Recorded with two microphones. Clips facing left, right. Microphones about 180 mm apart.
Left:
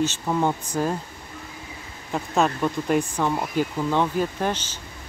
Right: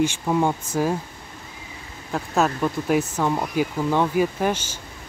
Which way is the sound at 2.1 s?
Centre (ahead or behind).